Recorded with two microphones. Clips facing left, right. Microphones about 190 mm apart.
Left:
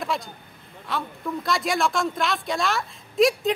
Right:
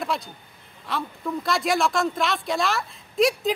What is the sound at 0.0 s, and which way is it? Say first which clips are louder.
A man's voice: even; centre (ahead or behind).